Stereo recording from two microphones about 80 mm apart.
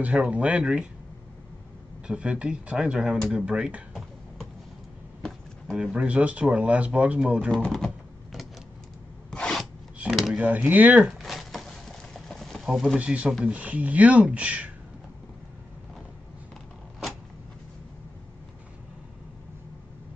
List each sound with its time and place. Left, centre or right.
0.0 s speech: centre
2.0 s speech: centre
5.8 s speech: centre
7.6 s typing: centre
9.3 s a sound: centre
10.3 s speech: centre
11.1 s a sound: centre
12.6 s speech: centre
13.0 s speech: centre